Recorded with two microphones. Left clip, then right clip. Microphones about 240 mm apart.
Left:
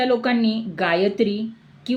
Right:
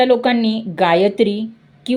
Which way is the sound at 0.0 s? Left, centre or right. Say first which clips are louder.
Right 6 dB; right.